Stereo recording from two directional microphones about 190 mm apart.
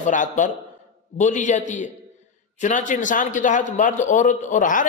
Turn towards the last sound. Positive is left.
turn(degrees=45)  # may be behind; listen again after turning